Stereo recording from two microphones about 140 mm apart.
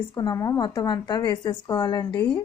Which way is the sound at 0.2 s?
25° left (ahead or behind).